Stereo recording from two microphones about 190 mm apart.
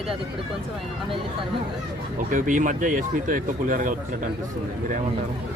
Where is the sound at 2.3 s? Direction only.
45° right (ahead or behind).